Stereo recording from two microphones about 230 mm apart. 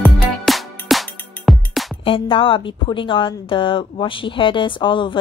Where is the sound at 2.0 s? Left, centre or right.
Left.